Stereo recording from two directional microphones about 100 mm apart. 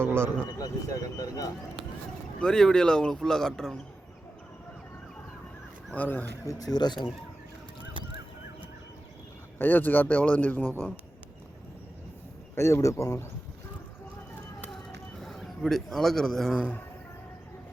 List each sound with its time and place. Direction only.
0.0 s a sound: 25° right (ahead or behind)
0.6 s speech: 35° left (ahead or behind)
2.4 s speech: 5° left (ahead or behind)
5.9 s speech: 15° left (ahead or behind)
6.4 s speech: 35° left (ahead or behind)
9.6 s speech: 20° left (ahead or behind)
12.5 s speech: 30° left (ahead or behind)
15.2 s a man's voice: 5° left (ahead or behind)